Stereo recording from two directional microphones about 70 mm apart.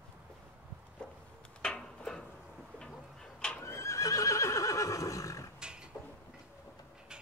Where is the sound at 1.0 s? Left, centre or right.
Centre.